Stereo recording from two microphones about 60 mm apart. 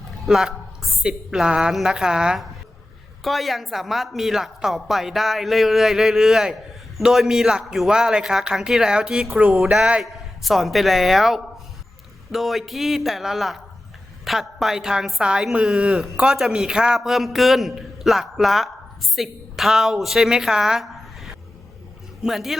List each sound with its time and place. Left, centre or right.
0.3 s a sound: centre
1.0 s a woman's voice: centre
3.2 s a woman's voice: centre
10.0 s a woman's voice: centre